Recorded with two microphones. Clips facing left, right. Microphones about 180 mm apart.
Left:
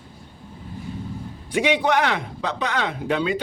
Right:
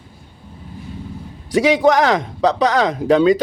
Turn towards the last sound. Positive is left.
turn(degrees=-40)  # may be behind; listen again after turning